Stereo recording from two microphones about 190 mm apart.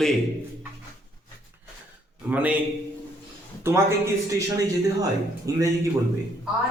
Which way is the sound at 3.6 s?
15° right (ahead or behind).